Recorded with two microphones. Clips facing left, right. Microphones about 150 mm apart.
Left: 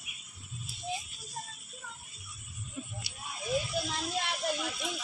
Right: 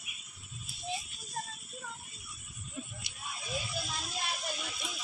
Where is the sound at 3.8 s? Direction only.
70° left (ahead or behind).